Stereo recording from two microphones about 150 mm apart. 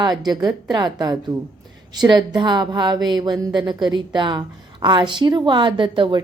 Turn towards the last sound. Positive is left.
turn(degrees=-35)  # may be behind; listen again after turning